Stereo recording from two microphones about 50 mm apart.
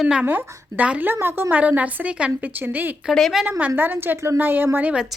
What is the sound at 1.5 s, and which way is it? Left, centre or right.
Speech, right.